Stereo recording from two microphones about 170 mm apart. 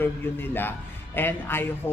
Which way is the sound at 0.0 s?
10° left (ahead or behind).